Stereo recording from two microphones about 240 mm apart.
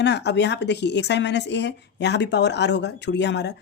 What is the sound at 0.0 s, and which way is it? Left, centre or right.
A woman's voice, left.